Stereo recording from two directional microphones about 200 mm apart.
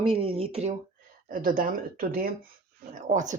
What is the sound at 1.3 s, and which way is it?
Speech, 45° right (ahead or behind).